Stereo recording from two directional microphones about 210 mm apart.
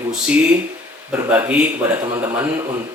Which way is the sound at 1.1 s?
10° right (ahead or behind).